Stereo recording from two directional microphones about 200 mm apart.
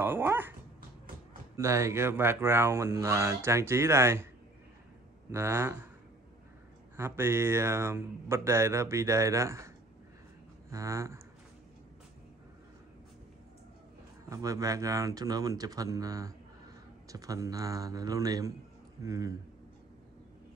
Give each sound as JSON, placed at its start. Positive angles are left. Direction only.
{"t": 0.0, "sound": "speech", "side_deg": -10}
{"t": 1.6, "sound": "speech", "side_deg": -15}
{"t": 5.3, "sound": "speech", "side_deg": -10}
{"t": 7.0, "sound": "speech", "side_deg": -10}
{"t": 10.7, "sound": "speech", "side_deg": -15}
{"t": 14.3, "sound": "speech", "side_deg": -15}